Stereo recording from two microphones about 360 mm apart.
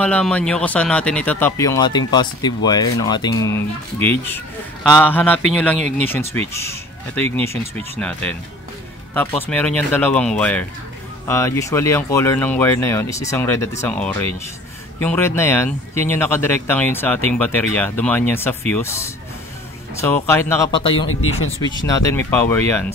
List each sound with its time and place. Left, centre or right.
0.0 s speech: centre
5.8 s speech: centre
6.0 s speech: centre